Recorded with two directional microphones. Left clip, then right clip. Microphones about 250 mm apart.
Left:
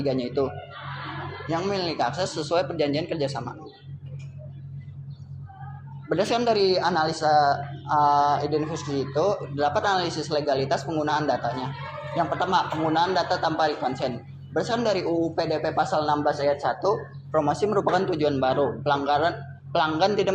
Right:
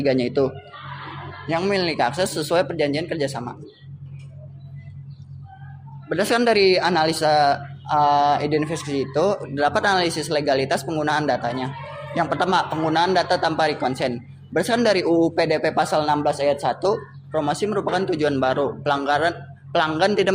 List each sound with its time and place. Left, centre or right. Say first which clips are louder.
0.0 s speech: right 5 dB; right
6.1 s speech: right 4 dB; right
17.3 s speech: even; right
17.7 s speech: even; centre
18.1 s speech: right 3 dB; right